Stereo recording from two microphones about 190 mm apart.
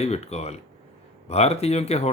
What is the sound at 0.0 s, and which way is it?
Speech, 35° left (ahead or behind).